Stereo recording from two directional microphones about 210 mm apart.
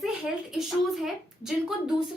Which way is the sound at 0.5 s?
Centre (ahead or behind).